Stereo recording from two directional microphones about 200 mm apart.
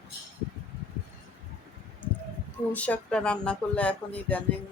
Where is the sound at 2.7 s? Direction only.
5° left (ahead or behind).